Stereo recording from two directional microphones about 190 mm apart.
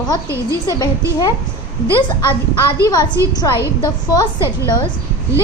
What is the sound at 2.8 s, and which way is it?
Speech, 20° left (ahead or behind).